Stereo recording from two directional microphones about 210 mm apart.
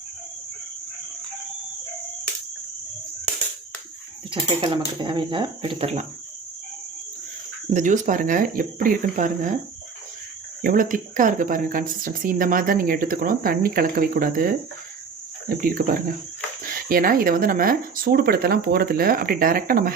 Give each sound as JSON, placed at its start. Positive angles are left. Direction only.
{"t": 4.3, "sound": "speech", "side_deg": -25}
{"t": 7.7, "sound": "speech", "side_deg": -35}
{"t": 10.6, "sound": "speech", "side_deg": -40}